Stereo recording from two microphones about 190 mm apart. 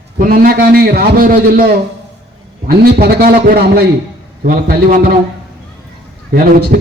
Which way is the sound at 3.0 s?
50° right (ahead or behind).